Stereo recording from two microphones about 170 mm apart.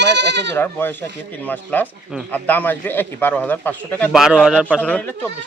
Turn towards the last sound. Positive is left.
turn(degrees=-5)  # may be behind; listen again after turning